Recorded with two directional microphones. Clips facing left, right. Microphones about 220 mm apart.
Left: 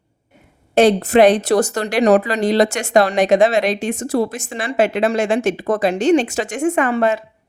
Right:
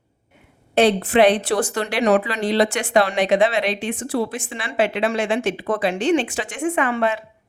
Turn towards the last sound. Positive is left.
turn(degrees=40)  # may be behind; listen again after turning